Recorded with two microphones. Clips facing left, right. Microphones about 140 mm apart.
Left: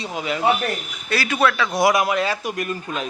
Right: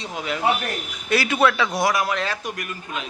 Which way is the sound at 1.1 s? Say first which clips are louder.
Right 1 dB; 20° right (ahead or behind).